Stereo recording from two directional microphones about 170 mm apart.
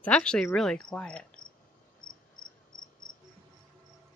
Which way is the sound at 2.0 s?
55° left (ahead or behind).